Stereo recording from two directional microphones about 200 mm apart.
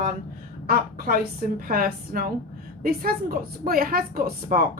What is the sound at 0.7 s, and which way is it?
A woman's voice, 45° right (ahead or behind).